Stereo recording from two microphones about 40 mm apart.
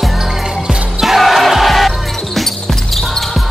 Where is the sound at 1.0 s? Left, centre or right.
Centre.